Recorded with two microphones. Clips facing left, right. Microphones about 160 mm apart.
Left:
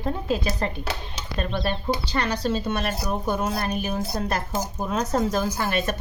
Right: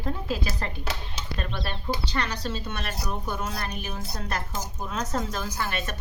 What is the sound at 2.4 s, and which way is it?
Speech, 45° left (ahead or behind).